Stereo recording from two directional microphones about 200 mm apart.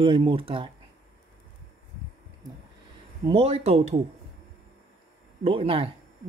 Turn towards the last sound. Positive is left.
turn(degrees=-30)  # may be behind; listen again after turning